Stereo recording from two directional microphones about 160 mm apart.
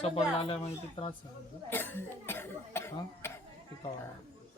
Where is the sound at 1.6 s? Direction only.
15° left (ahead or behind).